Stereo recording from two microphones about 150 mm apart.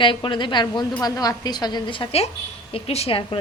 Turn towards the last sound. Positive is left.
turn(degrees=35)  # may be behind; listen again after turning